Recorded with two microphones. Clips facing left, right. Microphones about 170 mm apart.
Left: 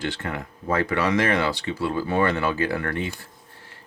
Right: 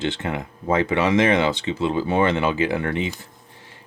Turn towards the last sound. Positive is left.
turn(degrees=-20)  # may be behind; listen again after turning